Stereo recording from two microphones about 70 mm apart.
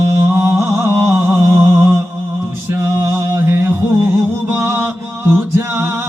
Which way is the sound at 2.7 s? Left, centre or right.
Right.